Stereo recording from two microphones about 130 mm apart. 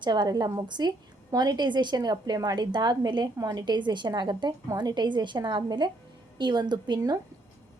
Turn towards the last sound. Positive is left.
turn(degrees=-30)  # may be behind; listen again after turning